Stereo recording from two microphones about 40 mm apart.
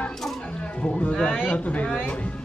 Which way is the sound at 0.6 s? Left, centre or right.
Left.